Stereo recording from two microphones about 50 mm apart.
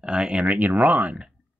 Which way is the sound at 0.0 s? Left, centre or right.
Centre.